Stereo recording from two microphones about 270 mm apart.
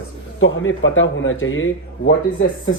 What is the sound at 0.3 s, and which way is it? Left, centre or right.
Speech, left.